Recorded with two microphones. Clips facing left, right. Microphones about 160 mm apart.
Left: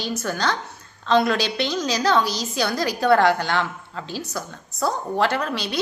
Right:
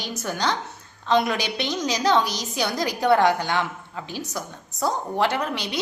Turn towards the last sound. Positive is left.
turn(degrees=-15)  # may be behind; listen again after turning